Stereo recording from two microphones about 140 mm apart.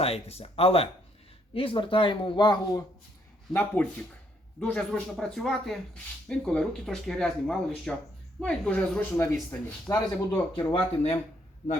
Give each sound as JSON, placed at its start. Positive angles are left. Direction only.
{"t": 0.0, "sound": "speech", "side_deg": 45}
{"t": 3.5, "sound": "speech", "side_deg": 15}
{"t": 10.5, "sound": "speech", "side_deg": 40}